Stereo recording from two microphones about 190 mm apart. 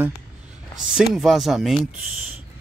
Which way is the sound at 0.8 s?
Centre (ahead or behind).